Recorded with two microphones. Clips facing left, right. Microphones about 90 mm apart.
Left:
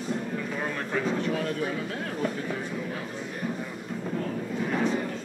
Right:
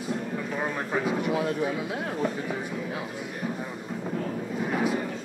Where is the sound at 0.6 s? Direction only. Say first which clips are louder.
Right 2 dB; 15° right (ahead or behind).